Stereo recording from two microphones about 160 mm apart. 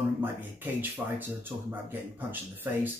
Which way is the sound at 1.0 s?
10° right (ahead or behind).